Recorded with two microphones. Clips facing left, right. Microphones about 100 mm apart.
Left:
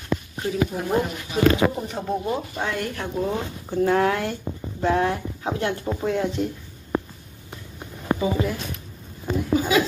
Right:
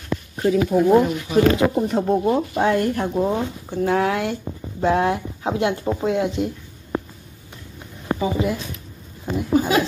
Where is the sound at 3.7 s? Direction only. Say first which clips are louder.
Even; centre (ahead or behind).